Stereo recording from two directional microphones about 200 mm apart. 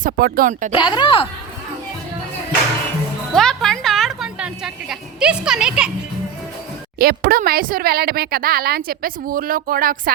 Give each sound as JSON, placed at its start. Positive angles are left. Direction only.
{"t": 0.0, "sound": "speech", "side_deg": -45}
{"t": 0.7, "sound": "speech", "side_deg": 25}
{"t": 3.3, "sound": "music", "side_deg": 0}
{"t": 7.0, "sound": "speech", "side_deg": -50}